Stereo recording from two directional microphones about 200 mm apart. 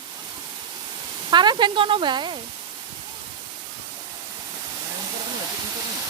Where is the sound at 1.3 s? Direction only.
20° right (ahead or behind).